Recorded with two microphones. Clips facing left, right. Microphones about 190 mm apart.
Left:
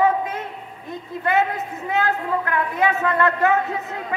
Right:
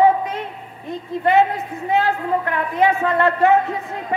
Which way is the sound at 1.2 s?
30° right (ahead or behind).